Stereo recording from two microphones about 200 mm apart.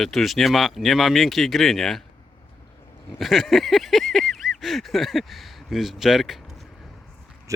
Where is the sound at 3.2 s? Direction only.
Centre (ahead or behind).